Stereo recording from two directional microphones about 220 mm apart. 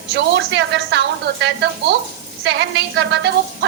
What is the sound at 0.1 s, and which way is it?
A woman's voice, 50° right (ahead or behind).